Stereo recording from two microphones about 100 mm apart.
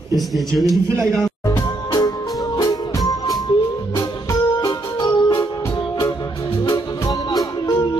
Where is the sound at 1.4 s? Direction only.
40° left (ahead or behind).